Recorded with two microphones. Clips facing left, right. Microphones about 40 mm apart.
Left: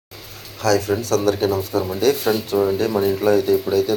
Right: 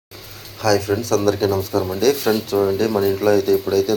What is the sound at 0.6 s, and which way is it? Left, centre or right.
Speech, left.